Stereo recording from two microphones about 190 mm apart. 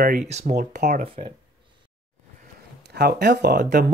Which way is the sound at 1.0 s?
30° right (ahead or behind).